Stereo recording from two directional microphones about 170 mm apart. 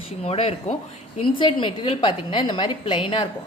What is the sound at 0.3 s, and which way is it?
A woman's voice, 35° left (ahead or behind).